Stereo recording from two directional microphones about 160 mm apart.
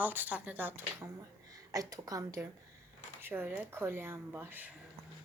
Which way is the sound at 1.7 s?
20° right (ahead or behind).